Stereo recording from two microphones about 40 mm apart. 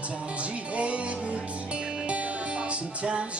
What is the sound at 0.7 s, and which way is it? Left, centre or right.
Music, right.